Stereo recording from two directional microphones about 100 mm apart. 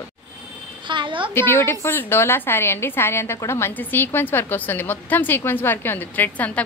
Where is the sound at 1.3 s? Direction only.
25° left (ahead or behind).